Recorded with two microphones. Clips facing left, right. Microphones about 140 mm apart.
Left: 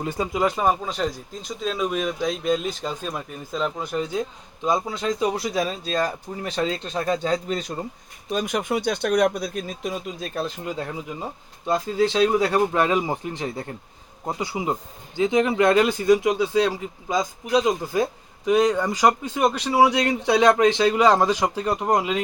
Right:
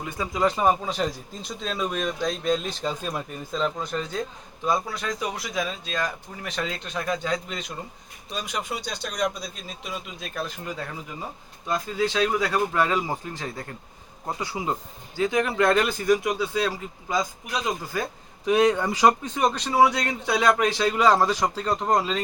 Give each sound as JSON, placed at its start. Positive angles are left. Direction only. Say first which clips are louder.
{"t": 0.0, "sound": "speech", "louder": "left 5 dB", "side_deg": 25}
{"t": 0.5, "sound": "speech", "louder": "even", "side_deg": 0}
{"t": 8.3, "sound": "speech", "louder": "left 7 dB", "side_deg": 50}
{"t": 18.4, "sound": "speech", "louder": "left 1 dB", "side_deg": 0}